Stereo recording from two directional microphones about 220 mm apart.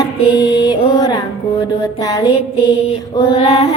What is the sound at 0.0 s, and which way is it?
Music, 20° left (ahead or behind).